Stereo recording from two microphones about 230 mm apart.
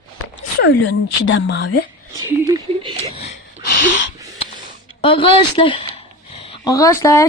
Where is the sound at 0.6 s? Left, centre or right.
Left.